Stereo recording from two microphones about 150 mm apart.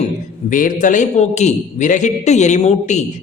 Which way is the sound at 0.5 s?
60° left (ahead or behind).